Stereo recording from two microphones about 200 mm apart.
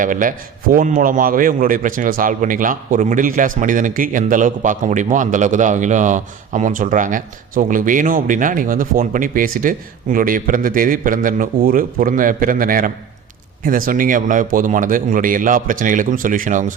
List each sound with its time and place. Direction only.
0.0 s a man's voice: 40° right (ahead or behind)